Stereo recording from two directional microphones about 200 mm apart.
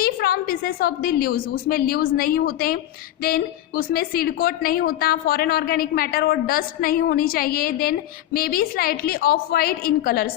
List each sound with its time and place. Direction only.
0.0 s a woman's voice: 50° left (ahead or behind)